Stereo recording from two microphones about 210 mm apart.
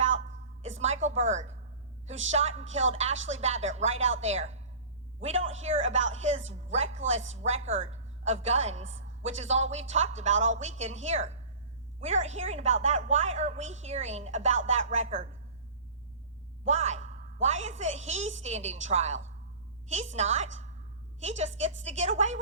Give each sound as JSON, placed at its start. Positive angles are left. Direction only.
{"t": 0.8, "sound": "music", "side_deg": -30}
{"t": 1.3, "sound": "a woman's voice", "side_deg": -35}
{"t": 8.8, "sound": "a woman's voice", "side_deg": -65}
{"t": 9.2, "sound": "a woman's voice", "side_deg": -30}
{"t": 16.6, "sound": "a woman's voice", "side_deg": -35}